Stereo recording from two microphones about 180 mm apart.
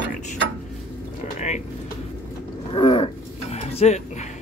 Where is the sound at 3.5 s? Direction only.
35° left (ahead or behind).